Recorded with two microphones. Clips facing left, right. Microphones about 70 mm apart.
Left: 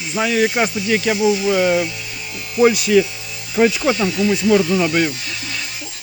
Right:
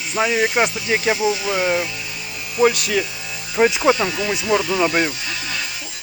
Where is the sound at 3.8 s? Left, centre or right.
Right.